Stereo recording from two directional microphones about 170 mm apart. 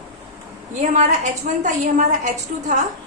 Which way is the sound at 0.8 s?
40° right (ahead or behind).